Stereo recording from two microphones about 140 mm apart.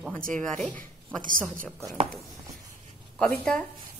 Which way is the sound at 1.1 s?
75° right (ahead or behind).